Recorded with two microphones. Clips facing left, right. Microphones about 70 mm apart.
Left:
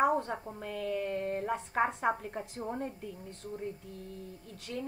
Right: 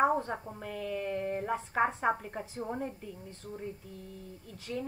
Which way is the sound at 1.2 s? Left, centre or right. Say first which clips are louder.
Even; centre.